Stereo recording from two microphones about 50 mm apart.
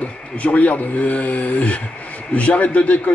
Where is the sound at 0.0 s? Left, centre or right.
Left.